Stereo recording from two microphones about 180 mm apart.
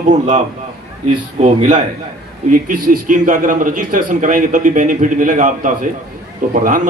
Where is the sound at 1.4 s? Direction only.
40° right (ahead or behind).